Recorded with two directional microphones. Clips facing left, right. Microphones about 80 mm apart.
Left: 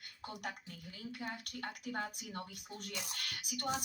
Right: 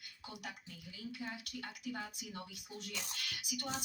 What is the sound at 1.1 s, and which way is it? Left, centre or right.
A woman's voice, left.